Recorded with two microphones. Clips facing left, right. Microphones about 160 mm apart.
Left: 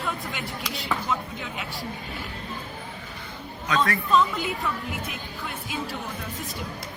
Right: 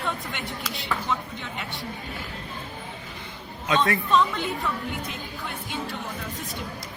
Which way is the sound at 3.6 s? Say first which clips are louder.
Right 2 dB; 25° right (ahead or behind).